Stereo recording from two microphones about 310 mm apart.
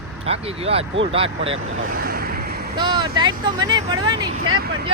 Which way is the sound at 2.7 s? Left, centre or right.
Centre.